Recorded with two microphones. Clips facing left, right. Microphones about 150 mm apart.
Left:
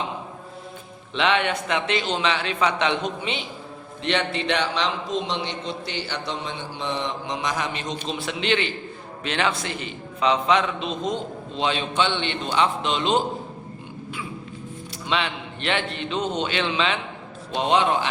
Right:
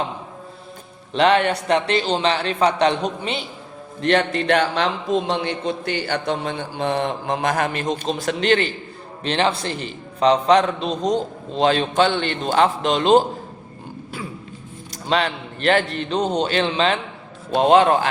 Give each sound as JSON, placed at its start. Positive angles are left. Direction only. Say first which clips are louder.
{"t": 1.1, "sound": "a man's voice", "louder": "right 6 dB", "side_deg": -40}
{"t": 14.8, "sound": "a man's voice", "louder": "right 5 dB", "side_deg": -40}